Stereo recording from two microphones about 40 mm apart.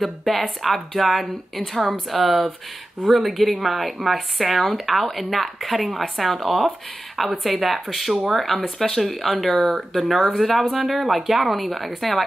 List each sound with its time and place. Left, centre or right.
0.0 s speech: centre